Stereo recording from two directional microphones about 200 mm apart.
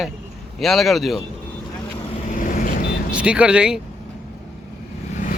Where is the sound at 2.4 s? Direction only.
45° left (ahead or behind).